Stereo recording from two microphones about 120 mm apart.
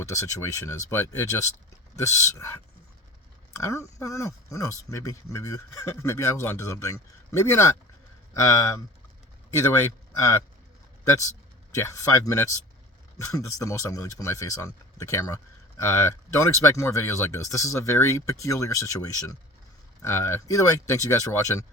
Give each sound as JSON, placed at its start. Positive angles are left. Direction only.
{"t": 0.0, "sound": "speech", "side_deg": 25}
{"t": 3.6, "sound": "speech", "side_deg": 25}
{"t": 11.7, "sound": "speech", "side_deg": 25}